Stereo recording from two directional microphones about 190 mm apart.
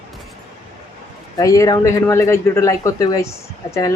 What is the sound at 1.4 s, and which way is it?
A man's voice, 15° left (ahead or behind).